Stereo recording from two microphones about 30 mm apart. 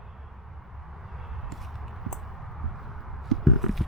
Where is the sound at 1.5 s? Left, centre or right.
Centre.